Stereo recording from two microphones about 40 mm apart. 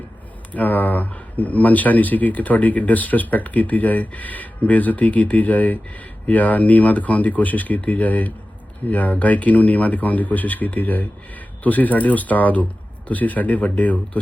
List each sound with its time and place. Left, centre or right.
0.5 s speech: left